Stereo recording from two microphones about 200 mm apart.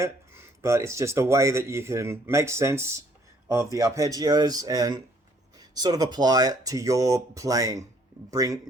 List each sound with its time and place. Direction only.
0.0 s speech: 15° right (ahead or behind)